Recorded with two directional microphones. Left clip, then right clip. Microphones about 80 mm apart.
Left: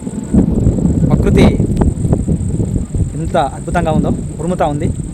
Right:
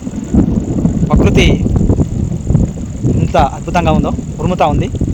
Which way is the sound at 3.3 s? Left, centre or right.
Left.